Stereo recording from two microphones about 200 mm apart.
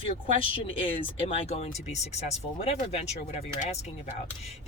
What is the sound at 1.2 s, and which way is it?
Speech, 30° left (ahead or behind).